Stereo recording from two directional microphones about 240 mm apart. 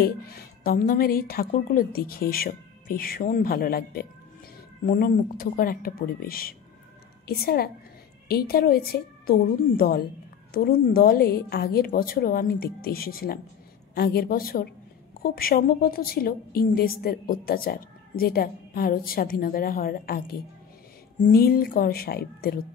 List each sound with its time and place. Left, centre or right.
0.0 s a woman's voice: left